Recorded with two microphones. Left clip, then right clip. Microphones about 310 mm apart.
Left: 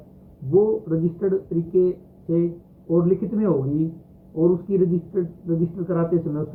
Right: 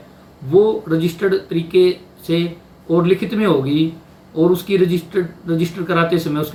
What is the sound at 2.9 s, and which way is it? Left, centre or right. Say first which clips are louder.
Speech: right 5 dB; right.